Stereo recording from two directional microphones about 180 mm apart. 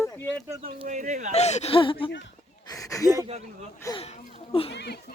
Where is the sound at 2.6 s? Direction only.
20° left (ahead or behind).